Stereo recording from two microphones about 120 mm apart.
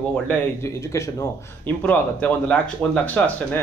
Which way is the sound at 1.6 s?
15° left (ahead or behind).